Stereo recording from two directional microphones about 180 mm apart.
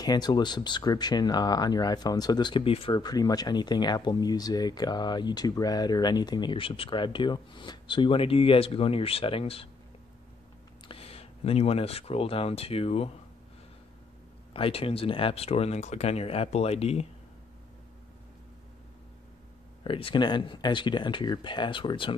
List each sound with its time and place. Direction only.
0.0 s speech: 20° left (ahead or behind)
10.9 s speech: 35° left (ahead or behind)
14.5 s speech: 30° left (ahead or behind)
19.8 s speech: 30° left (ahead or behind)